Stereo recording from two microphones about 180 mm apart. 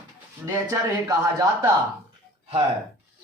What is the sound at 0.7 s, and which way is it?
Speech, 20° right (ahead or behind).